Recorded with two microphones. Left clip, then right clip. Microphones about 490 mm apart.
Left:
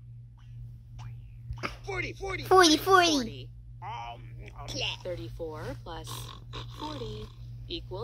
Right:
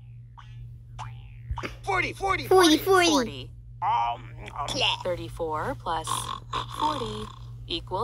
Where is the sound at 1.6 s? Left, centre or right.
Centre.